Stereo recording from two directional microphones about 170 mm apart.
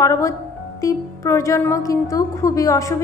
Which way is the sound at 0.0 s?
20° left (ahead or behind).